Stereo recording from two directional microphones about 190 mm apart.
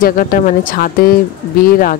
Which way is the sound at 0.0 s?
45° left (ahead or behind).